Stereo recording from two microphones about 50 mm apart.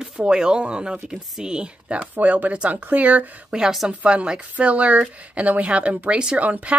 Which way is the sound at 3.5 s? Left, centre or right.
Centre.